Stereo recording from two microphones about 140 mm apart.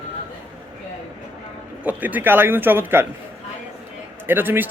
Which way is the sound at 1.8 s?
10° right (ahead or behind).